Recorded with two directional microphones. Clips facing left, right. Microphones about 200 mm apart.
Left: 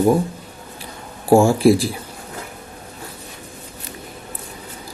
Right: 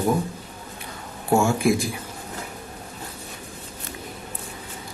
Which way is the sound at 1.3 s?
30° left (ahead or behind).